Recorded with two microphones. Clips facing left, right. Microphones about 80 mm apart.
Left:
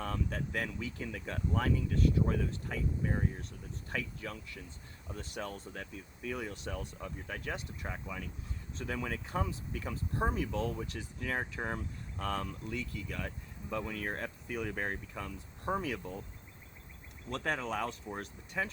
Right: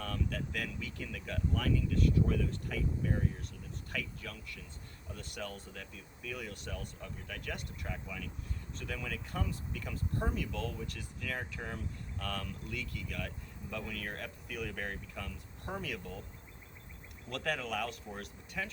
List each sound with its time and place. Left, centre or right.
0.0 s speech: left
17.2 s speech: left